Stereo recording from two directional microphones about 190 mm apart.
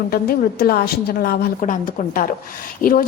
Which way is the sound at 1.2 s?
50° left (ahead or behind).